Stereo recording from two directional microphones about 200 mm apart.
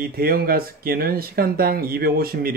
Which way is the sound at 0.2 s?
50° right (ahead or behind).